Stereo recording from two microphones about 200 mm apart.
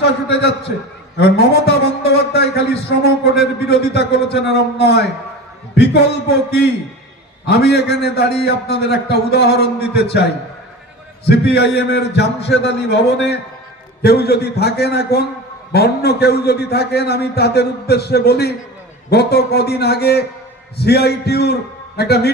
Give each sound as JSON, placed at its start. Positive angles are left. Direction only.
{"t": 0.0, "sound": "a man's voice", "side_deg": 55}